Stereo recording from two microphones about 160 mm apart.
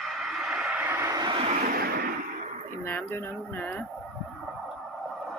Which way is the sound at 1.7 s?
70° right (ahead or behind).